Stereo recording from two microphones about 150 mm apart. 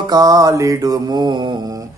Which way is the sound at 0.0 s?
25° right (ahead or behind).